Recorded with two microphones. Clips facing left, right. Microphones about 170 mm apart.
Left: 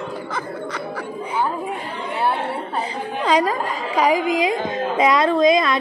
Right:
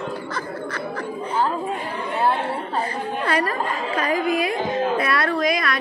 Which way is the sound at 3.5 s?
90° left.